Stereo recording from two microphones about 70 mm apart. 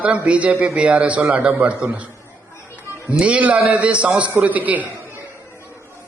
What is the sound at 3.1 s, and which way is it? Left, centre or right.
A man's voice, centre.